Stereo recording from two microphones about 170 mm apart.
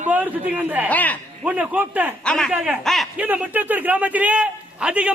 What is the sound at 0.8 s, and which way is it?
Speech, 10° left (ahead or behind).